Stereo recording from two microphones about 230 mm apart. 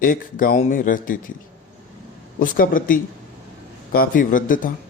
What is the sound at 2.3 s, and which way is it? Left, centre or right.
Speech, left.